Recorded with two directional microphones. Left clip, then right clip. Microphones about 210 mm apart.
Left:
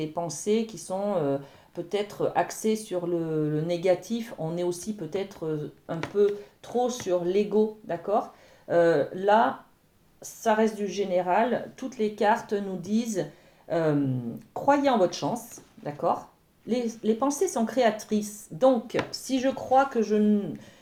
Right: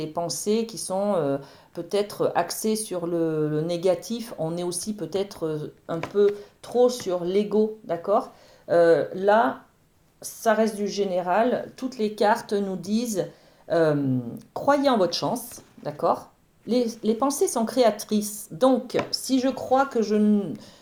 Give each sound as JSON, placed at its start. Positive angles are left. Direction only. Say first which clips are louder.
{"t": 0.0, "sound": "speech", "louder": "right 3 dB", "side_deg": -35}